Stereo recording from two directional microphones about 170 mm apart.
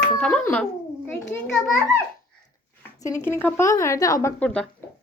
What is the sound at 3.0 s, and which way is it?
Speech, 15° left (ahead or behind).